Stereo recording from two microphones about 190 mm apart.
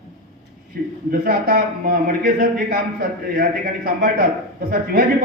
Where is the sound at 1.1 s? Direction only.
50° right (ahead or behind).